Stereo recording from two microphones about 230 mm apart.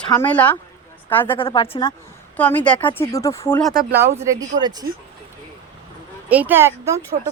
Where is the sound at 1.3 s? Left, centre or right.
Left.